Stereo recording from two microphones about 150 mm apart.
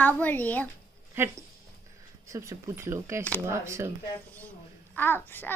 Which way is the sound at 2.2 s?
20° right (ahead or behind).